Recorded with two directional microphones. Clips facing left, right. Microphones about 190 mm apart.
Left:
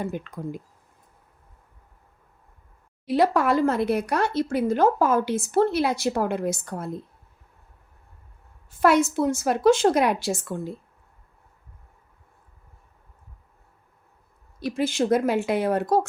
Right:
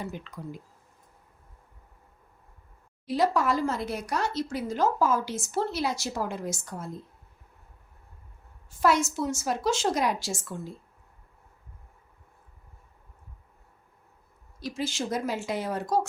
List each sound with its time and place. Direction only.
0.0 s speech: 50° left (ahead or behind)
3.1 s speech: 60° left (ahead or behind)
8.8 s speech: 60° left (ahead or behind)
14.6 s speech: 60° left (ahead or behind)